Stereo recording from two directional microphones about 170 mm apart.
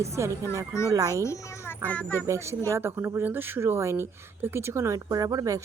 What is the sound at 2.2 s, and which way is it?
Speech, 15° right (ahead or behind).